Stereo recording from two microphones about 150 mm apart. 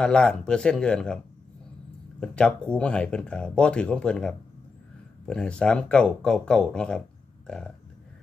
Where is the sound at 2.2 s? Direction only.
5° left (ahead or behind).